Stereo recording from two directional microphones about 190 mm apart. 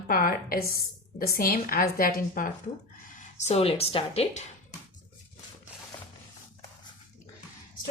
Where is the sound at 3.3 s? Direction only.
35° left (ahead or behind).